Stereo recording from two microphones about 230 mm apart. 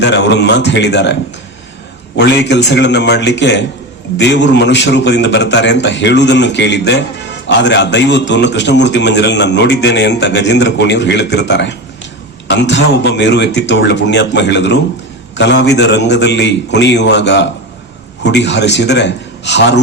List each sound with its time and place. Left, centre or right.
0.1 s a man's voice: left
2.1 s a man's voice: left